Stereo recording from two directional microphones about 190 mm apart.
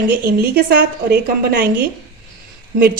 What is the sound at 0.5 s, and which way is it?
A woman's voice, 55° right (ahead or behind).